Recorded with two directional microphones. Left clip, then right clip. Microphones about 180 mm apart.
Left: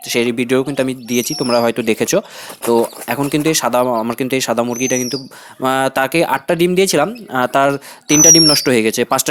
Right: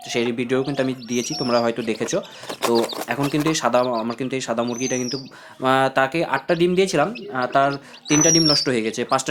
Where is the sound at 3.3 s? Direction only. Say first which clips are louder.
Left 4 dB; 40° left (ahead or behind).